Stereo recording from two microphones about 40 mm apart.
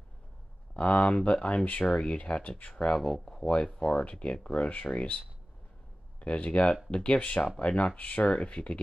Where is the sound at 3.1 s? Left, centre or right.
Left.